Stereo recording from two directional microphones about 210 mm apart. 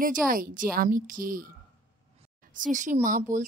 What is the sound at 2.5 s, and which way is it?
Speech, 35° right (ahead or behind).